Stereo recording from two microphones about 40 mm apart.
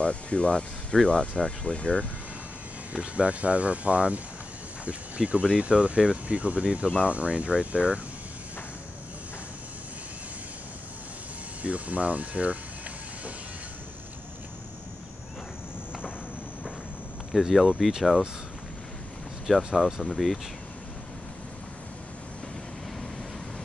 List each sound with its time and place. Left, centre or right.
0.0 s speech: left
2.9 s speech: right
11.6 s speech: right
17.3 s speech: centre
19.4 s speech: centre